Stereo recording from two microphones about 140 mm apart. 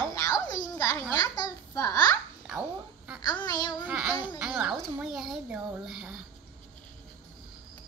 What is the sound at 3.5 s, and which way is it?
Speech, 30° left (ahead or behind).